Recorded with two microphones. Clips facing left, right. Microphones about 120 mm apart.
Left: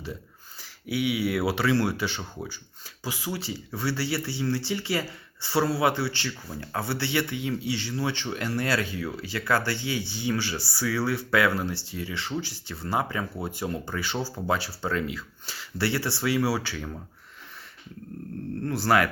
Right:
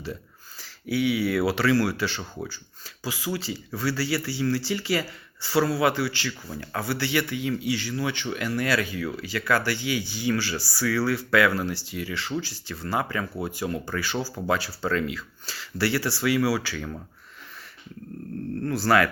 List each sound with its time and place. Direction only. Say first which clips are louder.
0.6 s speech: right 3 dB; 15° left (ahead or behind)
11.7 s speech: right 2 dB; 90° right
12.0 s speech: right 1 dB; 20° left (ahead or behind)
18.6 s speech: right 1 dB; 20° left (ahead or behind)